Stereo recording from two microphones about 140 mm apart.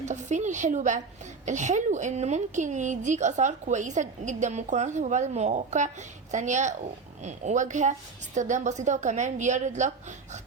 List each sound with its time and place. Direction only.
0.0 s a woman's voice: 55° right (ahead or behind)